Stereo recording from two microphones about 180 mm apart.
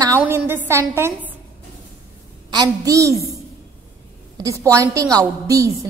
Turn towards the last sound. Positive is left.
turn(degrees=-20)  # may be behind; listen again after turning